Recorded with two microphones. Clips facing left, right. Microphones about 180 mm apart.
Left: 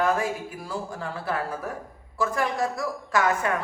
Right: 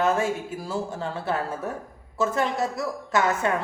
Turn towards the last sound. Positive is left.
turn(degrees=-25)  # may be behind; listen again after turning